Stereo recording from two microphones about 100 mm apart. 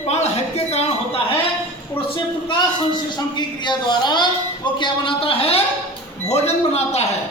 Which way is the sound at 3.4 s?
45° left (ahead or behind).